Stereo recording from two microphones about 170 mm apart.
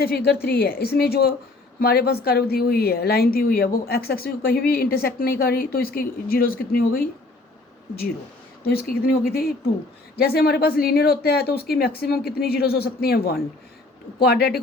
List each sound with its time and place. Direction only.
0.0 s a woman's voice: 65° left (ahead or behind)
8.9 s a woman's voice: 60° left (ahead or behind)